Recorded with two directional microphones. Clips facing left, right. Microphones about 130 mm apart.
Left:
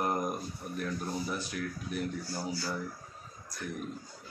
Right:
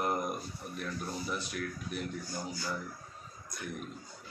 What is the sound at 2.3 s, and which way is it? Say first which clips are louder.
Speech: left 3 dB; 10° left (ahead or behind).